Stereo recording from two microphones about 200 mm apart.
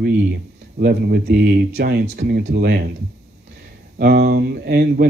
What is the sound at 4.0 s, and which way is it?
Speech, 50° right (ahead or behind).